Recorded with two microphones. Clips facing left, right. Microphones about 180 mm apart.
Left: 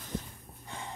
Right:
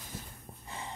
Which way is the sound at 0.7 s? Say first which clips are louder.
Left 1 dB; centre (ahead or behind).